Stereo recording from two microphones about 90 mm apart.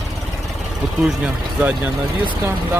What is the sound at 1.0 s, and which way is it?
Speech, 15° right (ahead or behind).